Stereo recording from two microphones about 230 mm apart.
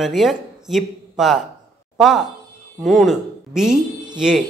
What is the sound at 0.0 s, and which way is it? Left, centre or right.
Speech, centre.